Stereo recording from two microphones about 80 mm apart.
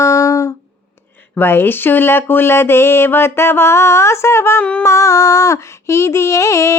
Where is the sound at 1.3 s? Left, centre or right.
Left.